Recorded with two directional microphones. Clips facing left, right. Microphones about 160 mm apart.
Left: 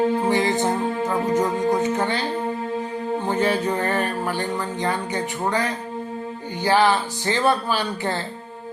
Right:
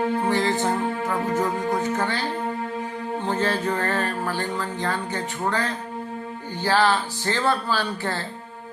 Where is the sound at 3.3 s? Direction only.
15° left (ahead or behind).